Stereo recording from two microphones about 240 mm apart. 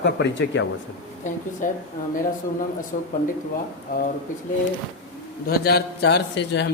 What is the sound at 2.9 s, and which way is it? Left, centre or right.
Speech, left.